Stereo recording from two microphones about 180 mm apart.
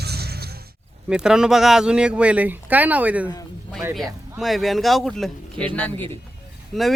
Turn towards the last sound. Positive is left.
turn(degrees=0)  # may be behind; listen again after turning